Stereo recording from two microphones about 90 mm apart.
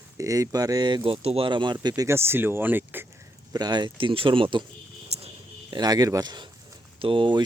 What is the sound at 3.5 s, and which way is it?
Speech, 50° right (ahead or behind).